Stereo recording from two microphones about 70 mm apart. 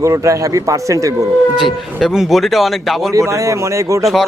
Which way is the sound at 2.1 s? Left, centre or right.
Centre.